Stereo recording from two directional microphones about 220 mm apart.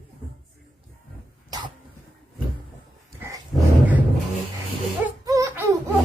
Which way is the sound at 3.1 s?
15° right (ahead or behind).